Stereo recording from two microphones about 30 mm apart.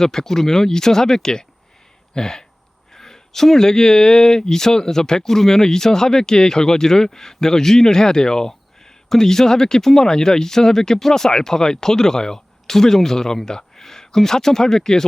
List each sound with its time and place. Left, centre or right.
0.0 s speech: centre